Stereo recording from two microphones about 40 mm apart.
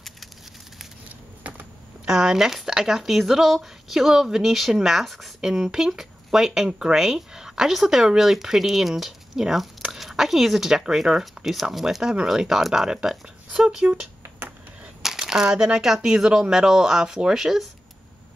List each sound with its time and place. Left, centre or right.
2.0 s speech: centre
5.5 s speech: centre
13.8 s speech: right
15.0 s speech: centre